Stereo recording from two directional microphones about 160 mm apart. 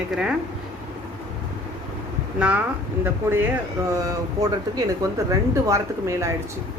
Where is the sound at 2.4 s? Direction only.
10° right (ahead or behind).